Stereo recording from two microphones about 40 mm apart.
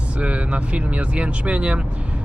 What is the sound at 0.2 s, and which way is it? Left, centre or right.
Speech, right.